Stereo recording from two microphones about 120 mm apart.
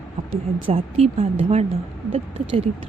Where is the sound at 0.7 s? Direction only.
65° right (ahead or behind).